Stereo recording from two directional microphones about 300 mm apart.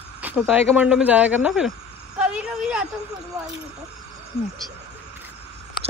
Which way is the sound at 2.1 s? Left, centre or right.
Centre.